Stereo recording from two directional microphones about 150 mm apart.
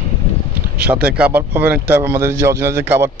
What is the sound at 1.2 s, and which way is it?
Speech, 10° right (ahead or behind).